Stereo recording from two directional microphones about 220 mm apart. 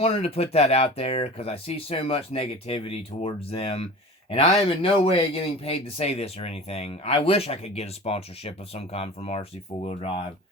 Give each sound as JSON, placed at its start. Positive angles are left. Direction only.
{"t": 0.0, "sound": "speech", "side_deg": 25}